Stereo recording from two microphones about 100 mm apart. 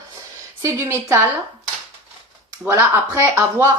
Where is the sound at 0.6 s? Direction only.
30° right (ahead or behind).